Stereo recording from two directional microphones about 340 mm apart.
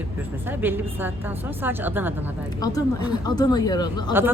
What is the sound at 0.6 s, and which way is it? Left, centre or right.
Speech, centre.